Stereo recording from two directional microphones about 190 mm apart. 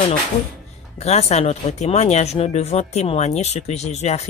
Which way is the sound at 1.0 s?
35° left (ahead or behind).